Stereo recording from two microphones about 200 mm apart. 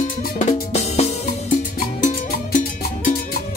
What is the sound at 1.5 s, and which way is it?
Music, 40° left (ahead or behind).